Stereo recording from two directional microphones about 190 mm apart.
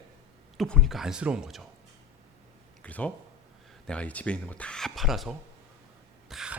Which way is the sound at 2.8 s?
5° left (ahead or behind).